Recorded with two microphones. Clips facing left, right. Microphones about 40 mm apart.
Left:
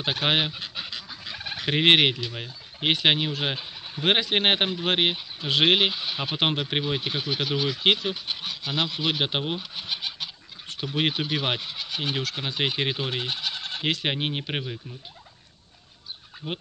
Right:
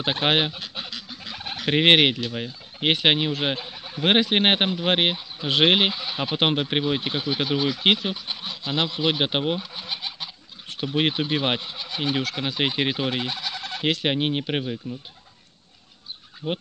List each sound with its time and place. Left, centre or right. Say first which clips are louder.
0.0 s goose: right 2 dB; right
0.8 s duck: right 1 dB; centre
1.3 s fowl: right 1 dB; right
1.7 s speech: right 2 dB; centre
5.4 s goose: right 2 dB; right
6.4 s speech: right 3 dB; centre
8.6 s goose: right 2 dB; right
9.0 s speech: right 3 dB; centre
10.7 s speech: right 3 dB; centre
12.3 s goose: right 3 dB; centre
12.5 s speech: right 2 dB; centre
13.3 s bleat: even; centre
14.0 s speech: right 4 dB; centre